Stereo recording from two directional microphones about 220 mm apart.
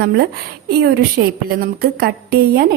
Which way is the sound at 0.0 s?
45° right (ahead or behind).